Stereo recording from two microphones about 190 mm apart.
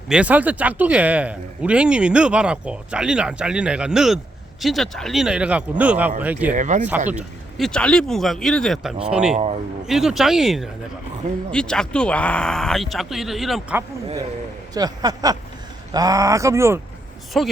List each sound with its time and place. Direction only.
0.1 s speech: 5° right (ahead or behind)
6.5 s speech: 40° right (ahead or behind)
7.1 s speech: 5° right (ahead or behind)
9.3 s speech: 35° right (ahead or behind)
9.8 s speech: centre (ahead or behind)
14.7 s speech: 20° right (ahead or behind)
17.3 s speech: centre (ahead or behind)